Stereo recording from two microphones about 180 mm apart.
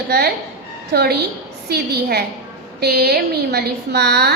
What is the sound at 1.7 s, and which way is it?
A woman's voice, 65° right (ahead or behind).